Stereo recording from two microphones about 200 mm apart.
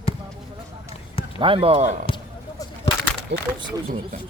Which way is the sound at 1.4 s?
25° right (ahead or behind).